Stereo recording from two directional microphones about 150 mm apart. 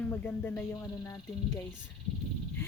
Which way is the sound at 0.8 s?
25° left (ahead or behind).